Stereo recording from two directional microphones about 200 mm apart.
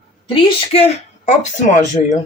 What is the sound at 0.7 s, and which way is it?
Speech, 35° left (ahead or behind).